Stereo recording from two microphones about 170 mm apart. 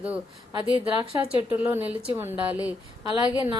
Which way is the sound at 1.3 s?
10° right (ahead or behind).